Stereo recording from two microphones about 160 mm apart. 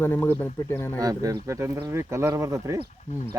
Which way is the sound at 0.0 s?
15° left (ahead or behind).